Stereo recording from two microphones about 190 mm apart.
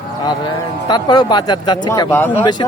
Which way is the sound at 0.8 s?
20° left (ahead or behind).